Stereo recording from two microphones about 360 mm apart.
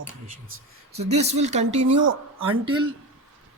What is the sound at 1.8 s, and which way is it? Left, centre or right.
Speech, right.